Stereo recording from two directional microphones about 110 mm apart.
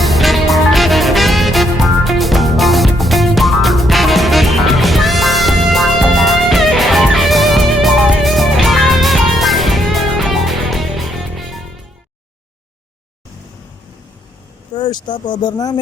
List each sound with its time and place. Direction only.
0.0 s music: centre (ahead or behind)
14.8 s speech: 40° left (ahead or behind)